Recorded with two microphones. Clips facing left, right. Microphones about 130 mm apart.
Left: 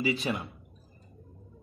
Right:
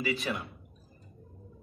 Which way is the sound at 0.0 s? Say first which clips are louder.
Left 3 dB; 25° left (ahead or behind).